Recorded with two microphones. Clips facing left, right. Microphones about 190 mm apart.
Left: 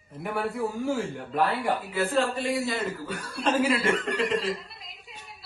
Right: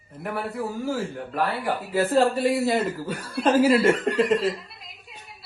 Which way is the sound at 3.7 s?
50° right (ahead or behind).